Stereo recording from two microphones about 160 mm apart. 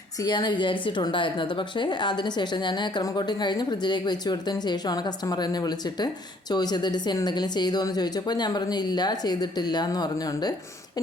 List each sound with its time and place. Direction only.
0.2 s a woman's voice: 25° left (ahead or behind)